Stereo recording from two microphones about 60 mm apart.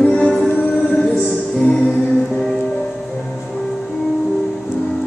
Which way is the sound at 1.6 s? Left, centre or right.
Centre.